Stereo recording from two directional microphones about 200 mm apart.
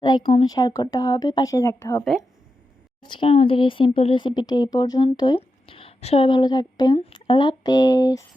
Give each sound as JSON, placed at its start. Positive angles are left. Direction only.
{"t": 0.0, "sound": "speech", "side_deg": 25}